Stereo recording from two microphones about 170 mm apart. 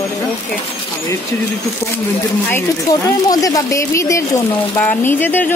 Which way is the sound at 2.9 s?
20° left (ahead or behind).